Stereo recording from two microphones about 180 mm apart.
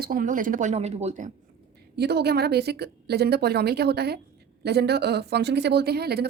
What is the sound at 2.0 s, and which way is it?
A woman's voice, 65° right (ahead or behind).